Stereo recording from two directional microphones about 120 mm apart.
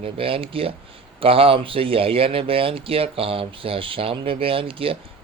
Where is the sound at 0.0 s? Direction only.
50° right (ahead or behind).